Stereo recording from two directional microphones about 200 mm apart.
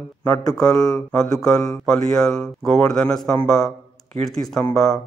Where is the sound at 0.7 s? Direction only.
15° left (ahead or behind).